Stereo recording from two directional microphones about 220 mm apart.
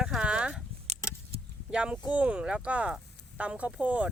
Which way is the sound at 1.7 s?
5° right (ahead or behind).